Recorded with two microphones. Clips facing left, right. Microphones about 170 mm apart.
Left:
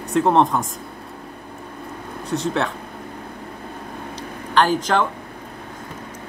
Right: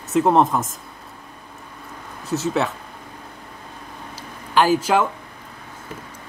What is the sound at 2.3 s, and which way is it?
Speech, 5° right (ahead or behind).